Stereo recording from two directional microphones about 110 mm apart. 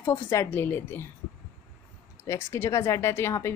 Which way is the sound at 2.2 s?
25° left (ahead or behind).